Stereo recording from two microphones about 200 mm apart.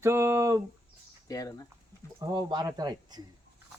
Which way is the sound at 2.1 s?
20° right (ahead or behind).